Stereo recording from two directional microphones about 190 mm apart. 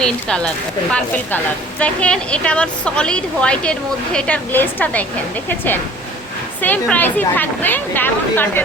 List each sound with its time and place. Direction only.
0.0 s a woman's voice: 5° left (ahead or behind)